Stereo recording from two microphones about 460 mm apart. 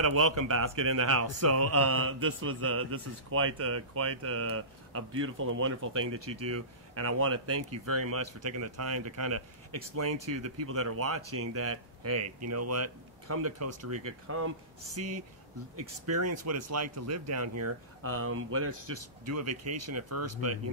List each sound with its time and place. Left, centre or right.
0.0 s speech: right